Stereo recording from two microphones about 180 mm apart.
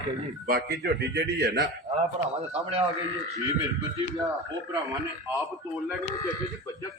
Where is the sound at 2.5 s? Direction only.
35° right (ahead or behind).